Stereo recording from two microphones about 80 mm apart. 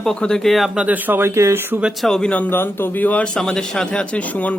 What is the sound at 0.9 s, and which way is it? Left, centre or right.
Speech, right.